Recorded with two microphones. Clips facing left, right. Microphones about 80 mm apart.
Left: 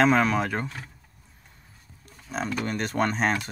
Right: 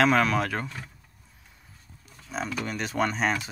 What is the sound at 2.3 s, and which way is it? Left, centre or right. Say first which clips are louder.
Speech: left 2 dB; centre.